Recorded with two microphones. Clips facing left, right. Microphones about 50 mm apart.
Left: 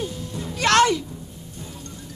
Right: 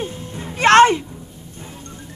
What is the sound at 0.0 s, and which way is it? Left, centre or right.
Music, right.